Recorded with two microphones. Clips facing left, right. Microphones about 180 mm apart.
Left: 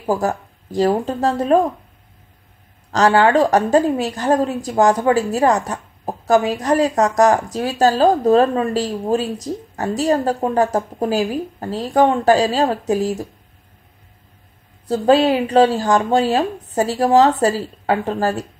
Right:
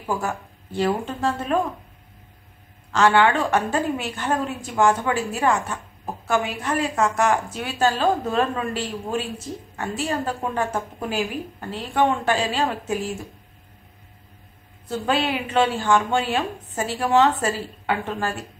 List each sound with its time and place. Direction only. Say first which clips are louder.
0.0 s a woman's voice: left 7 dB; 40° left (ahead or behind)
2.9 s a woman's voice: left 4 dB; 40° left (ahead or behind)
14.9 s a woman's voice: left 9 dB; 35° left (ahead or behind)